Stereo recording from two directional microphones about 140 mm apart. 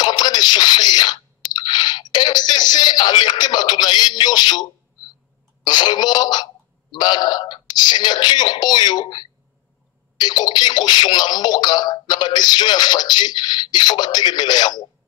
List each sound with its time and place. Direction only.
0.0 s drip: 30° left (ahead or behind)
5.6 s speech: 30° left (ahead or behind)